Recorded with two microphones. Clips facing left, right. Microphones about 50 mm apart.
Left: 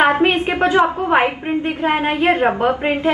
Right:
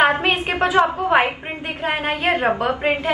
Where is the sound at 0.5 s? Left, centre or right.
Left.